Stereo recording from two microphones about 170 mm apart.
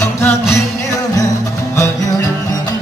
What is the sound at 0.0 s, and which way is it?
Music, 15° left (ahead or behind).